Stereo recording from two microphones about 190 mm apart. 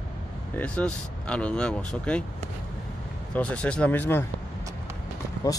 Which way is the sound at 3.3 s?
5° left (ahead or behind).